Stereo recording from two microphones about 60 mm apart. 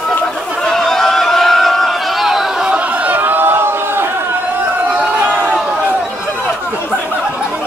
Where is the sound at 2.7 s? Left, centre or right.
Right.